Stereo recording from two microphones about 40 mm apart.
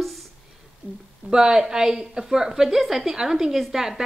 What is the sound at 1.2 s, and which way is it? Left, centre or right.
A woman's voice, centre.